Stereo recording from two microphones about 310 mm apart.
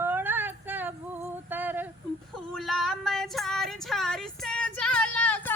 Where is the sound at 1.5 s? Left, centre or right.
Centre.